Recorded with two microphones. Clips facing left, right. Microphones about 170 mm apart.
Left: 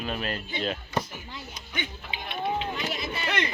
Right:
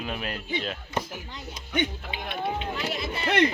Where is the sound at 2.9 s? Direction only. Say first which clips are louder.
Right 1 dB; centre (ahead or behind).